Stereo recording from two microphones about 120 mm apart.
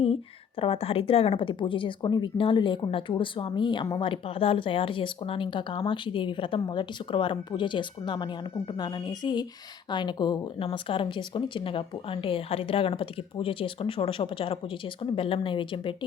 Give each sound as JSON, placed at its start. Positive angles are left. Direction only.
{"t": 0.6, "sound": "speech", "side_deg": 55}
{"t": 10.6, "sound": "speech", "side_deg": 50}